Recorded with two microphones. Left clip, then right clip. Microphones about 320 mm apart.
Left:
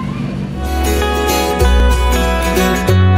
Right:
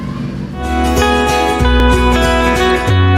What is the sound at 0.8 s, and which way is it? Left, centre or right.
Music, centre.